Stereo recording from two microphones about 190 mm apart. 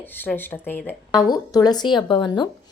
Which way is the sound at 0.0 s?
10° left (ahead or behind).